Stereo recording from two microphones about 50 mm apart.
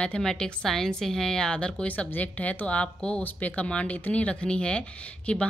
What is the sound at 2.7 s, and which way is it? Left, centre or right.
A woman's voice, left.